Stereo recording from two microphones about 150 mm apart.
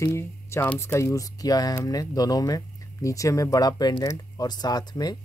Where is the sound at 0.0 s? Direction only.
20° left (ahead or behind).